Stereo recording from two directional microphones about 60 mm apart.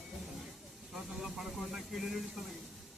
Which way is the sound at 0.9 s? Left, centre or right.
Centre.